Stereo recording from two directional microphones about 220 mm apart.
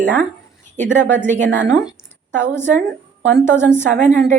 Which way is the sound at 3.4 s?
10° left (ahead or behind).